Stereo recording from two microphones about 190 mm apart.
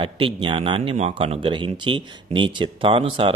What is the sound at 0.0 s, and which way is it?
Speech, 25° right (ahead or behind).